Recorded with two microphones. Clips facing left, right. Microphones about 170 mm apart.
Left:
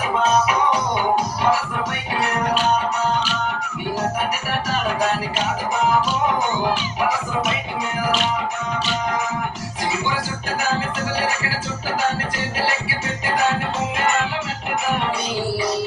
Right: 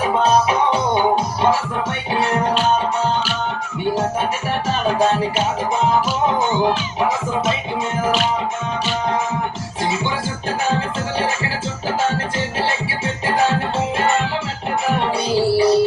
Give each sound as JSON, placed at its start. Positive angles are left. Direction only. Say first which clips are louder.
{"t": 0.0, "sound": "music", "louder": "right 3 dB", "side_deg": -30}
{"t": 4.6, "sound": "music", "louder": "right 5 dB", "side_deg": -25}
{"t": 9.8, "sound": "music", "louder": "right 2 dB", "side_deg": -25}
{"t": 13.2, "sound": "music", "louder": "right 3 dB", "side_deg": -30}